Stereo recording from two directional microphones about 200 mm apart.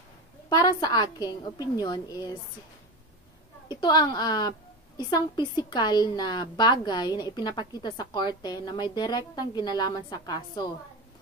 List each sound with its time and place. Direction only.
0.5 s a woman's voice: 20° left (ahead or behind)
3.6 s a woman's voice: 20° left (ahead or behind)